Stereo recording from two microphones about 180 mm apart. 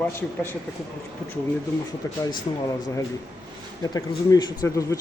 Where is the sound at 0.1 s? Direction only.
10° left (ahead or behind).